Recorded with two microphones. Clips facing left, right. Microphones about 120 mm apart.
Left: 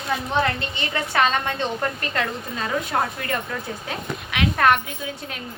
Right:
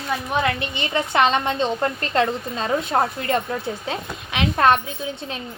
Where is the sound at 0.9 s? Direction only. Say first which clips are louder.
Right 3 dB; 20° right (ahead or behind).